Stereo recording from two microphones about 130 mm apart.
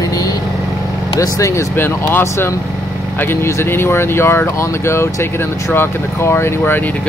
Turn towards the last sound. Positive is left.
turn(degrees=20)  # may be behind; listen again after turning